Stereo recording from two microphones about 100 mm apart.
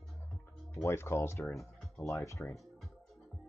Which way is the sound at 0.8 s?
25° left (ahead or behind).